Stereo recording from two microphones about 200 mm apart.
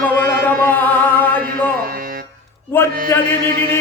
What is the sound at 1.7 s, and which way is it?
Music, 45° right (ahead or behind).